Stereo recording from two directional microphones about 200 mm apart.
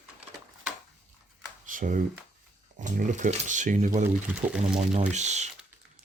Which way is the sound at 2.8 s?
40° right (ahead or behind).